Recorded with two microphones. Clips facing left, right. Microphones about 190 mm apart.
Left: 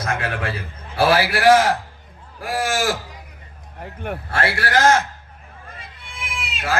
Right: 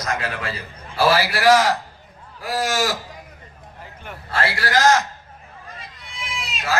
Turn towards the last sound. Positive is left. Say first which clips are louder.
# even
turn(degrees=55)  # may be behind; listen again after turning